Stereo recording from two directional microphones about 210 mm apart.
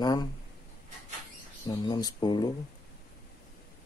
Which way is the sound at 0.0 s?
20° left (ahead or behind).